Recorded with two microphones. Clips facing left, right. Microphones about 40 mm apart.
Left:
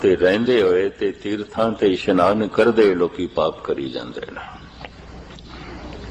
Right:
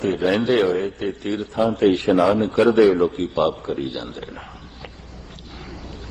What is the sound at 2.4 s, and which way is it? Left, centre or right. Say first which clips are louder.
Speech: even; left.